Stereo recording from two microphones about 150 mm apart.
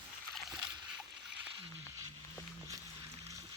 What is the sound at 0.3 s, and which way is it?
Dog, 5° right (ahead or behind).